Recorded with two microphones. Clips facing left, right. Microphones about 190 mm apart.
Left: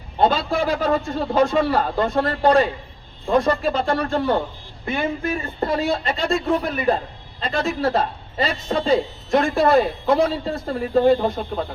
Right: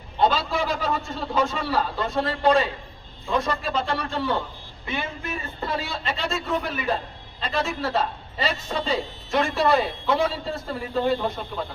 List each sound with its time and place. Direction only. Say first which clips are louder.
0.2 s a man's voice: left 3 dB; 55° left (ahead or behind)